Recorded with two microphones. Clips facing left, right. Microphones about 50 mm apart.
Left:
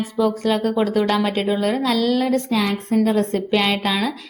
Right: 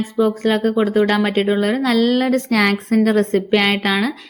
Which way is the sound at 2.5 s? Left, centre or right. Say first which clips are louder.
Right 4 dB; right.